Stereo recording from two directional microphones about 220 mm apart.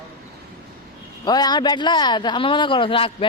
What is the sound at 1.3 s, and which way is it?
Speech, 20° left (ahead or behind).